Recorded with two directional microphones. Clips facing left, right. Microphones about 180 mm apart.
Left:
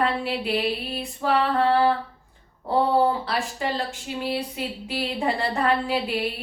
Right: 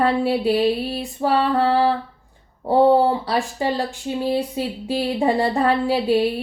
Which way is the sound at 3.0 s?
30° right (ahead or behind).